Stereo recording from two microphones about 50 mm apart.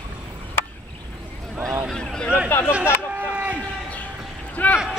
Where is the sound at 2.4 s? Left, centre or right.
Left.